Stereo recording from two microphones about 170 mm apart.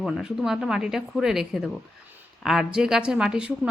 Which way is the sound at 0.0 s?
5° right (ahead or behind).